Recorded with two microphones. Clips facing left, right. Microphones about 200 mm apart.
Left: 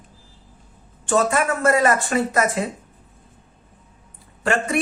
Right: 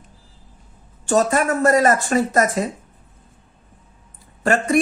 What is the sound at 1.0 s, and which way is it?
Speech, 40° right (ahead or behind).